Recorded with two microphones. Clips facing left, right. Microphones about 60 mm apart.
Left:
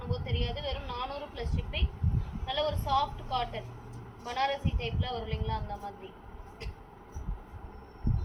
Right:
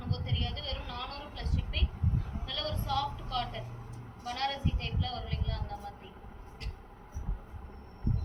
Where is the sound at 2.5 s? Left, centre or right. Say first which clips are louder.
Left 6 dB; centre.